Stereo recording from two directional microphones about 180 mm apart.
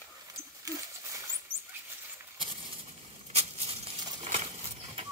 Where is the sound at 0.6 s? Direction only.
20° right (ahead or behind).